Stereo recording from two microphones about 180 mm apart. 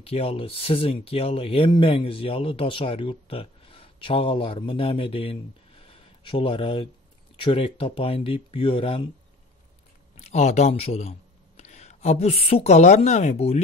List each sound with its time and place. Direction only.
0.0 s speech: 35° left (ahead or behind)
10.1 s speech: 35° left (ahead or behind)